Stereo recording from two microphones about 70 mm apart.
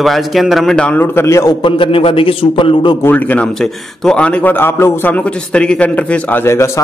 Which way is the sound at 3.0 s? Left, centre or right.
Left.